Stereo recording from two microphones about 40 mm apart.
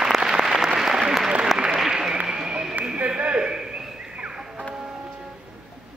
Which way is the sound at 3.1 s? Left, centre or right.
Right.